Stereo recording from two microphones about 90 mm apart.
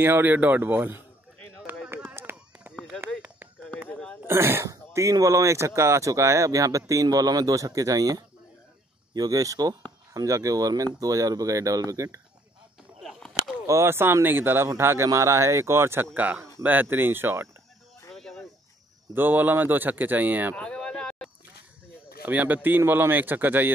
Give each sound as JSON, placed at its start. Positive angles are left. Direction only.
{"t": 0.0, "sound": "speech", "side_deg": -25}
{"t": 2.1, "sound": "a sound", "side_deg": -25}
{"t": 2.7, "sound": "a sound", "side_deg": 10}
{"t": 4.3, "sound": "speech", "side_deg": -25}
{"t": 13.0, "sound": "whip", "side_deg": -5}
{"t": 13.7, "sound": "speech", "side_deg": -30}
{"t": 18.1, "sound": "cricket", "side_deg": 5}
{"t": 19.1, "sound": "speech", "side_deg": -20}
{"t": 20.5, "sound": "a sound", "side_deg": 10}
{"t": 22.2, "sound": "speech", "side_deg": -20}